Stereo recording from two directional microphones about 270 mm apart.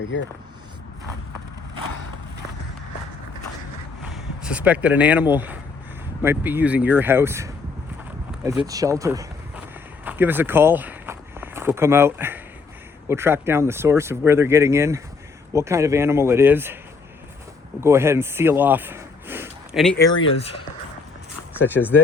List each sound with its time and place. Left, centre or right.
0.0 s speech: left
4.1 s a man's voice: centre
17.7 s speech: centre
21.7 s speech: centre